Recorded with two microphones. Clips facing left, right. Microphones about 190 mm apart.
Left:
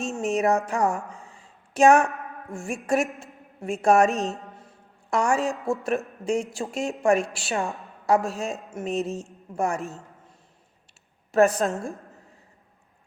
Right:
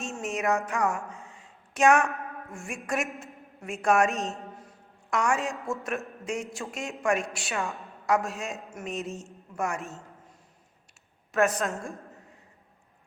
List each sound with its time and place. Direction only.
0.2 s a man's voice: 35° left (ahead or behind)
1.1 s a sound: 35° left (ahead or behind)
2.5 s a man's voice: 30° left (ahead or behind)
4.0 s a woman's voice: centre (ahead or behind)
5.1 s a man's voice: 35° left (ahead or behind)
11.3 s a man's voice: 35° left (ahead or behind)